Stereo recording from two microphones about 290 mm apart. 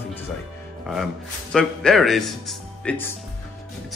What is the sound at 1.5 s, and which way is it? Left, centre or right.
Speech, centre.